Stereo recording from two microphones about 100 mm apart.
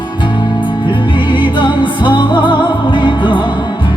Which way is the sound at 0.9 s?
50° left (ahead or behind).